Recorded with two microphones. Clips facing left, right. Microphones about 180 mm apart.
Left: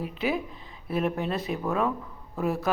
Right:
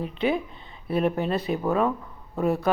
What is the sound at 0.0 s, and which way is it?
Speech, 5° left (ahead or behind).